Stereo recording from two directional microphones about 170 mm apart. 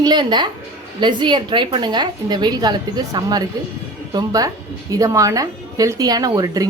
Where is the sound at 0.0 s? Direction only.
25° right (ahead or behind).